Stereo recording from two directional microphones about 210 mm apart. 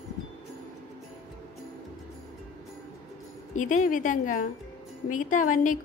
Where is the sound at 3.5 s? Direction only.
35° left (ahead or behind).